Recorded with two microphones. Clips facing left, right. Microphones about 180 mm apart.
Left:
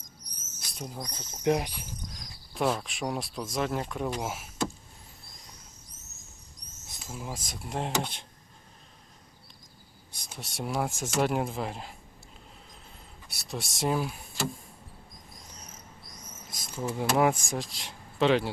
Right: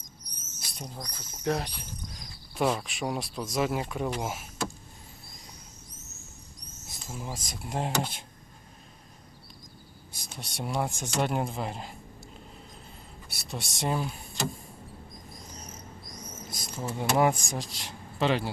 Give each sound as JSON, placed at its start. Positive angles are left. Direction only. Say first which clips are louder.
{"t": 0.7, "sound": "speech", "louder": "left 2 dB", "side_deg": 5}
{"t": 1.0, "sound": "speech", "louder": "left 4 dB", "side_deg": 20}
{"t": 2.0, "sound": "speech", "louder": "right 1 dB", "side_deg": 0}
{"t": 7.0, "sound": "speech", "louder": "even", "side_deg": 0}
{"t": 10.1, "sound": "speech", "louder": "even", "side_deg": 0}
{"t": 13.2, "sound": "speech", "louder": "left 1 dB", "side_deg": 0}
{"t": 16.5, "sound": "speech", "louder": "left 2 dB", "side_deg": 0}